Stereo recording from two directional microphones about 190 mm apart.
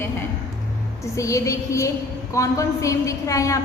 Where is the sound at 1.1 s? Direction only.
15° left (ahead or behind).